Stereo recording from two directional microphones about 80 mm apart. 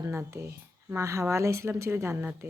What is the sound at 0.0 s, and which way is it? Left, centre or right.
Speech, right.